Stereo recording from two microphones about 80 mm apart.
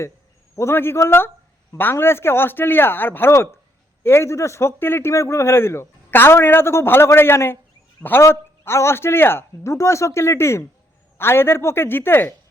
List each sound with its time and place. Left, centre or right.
0.5 s a man's voice: left